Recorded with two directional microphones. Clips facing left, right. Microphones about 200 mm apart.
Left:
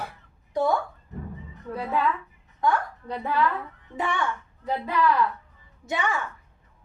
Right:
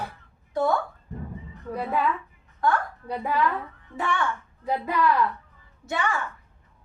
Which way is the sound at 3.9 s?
15° left (ahead or behind).